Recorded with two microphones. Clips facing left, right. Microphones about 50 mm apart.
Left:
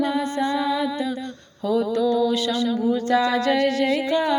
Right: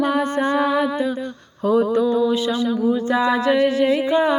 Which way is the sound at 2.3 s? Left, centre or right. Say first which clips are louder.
Right 2 dB; centre.